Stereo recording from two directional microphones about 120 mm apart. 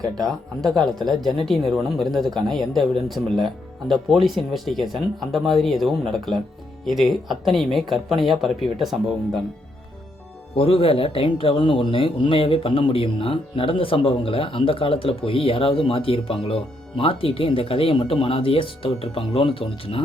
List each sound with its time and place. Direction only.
0.0 s speech: 5° left (ahead or behind)
10.5 s speech: 55° left (ahead or behind)